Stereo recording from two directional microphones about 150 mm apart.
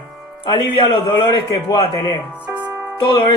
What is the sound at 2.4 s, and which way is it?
Speech, 10° right (ahead or behind).